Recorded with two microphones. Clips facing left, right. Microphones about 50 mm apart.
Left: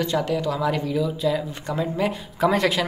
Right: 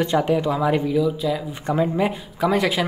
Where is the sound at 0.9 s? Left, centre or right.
Centre.